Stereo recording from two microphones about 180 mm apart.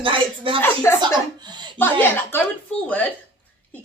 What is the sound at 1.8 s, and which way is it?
A woman's voice, 10° left (ahead or behind).